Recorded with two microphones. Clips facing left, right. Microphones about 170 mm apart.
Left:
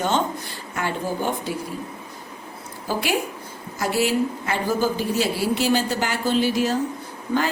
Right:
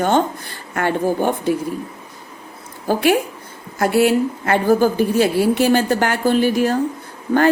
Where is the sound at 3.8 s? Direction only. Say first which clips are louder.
Right 6 dB; 55° right (ahead or behind).